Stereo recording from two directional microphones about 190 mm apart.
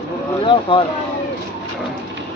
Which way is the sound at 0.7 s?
25° left (ahead or behind).